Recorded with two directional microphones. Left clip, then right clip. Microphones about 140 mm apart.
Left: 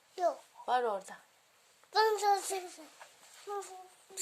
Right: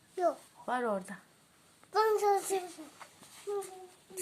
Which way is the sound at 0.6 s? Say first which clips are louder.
Left 2 dB; 40° left (ahead or behind).